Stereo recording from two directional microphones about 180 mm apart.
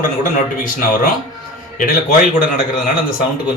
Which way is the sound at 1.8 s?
45° left (ahead or behind).